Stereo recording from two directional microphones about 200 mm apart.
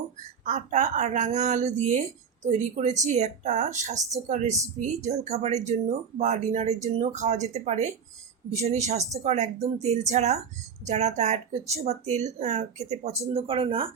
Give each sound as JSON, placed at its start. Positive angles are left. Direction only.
{"t": 0.4, "sound": "speech", "side_deg": -35}